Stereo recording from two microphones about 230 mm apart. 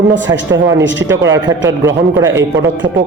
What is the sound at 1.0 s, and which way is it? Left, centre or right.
A man's voice, centre.